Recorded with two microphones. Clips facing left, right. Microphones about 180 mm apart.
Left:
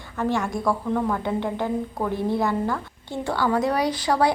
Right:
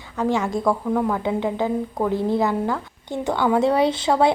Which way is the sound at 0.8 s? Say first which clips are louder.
Right 2 dB; 5° right (ahead or behind).